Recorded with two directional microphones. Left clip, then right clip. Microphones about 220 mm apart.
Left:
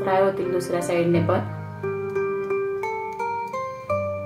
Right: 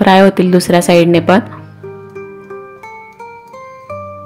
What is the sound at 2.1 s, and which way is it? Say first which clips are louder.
Music: left 4 dB; centre (ahead or behind).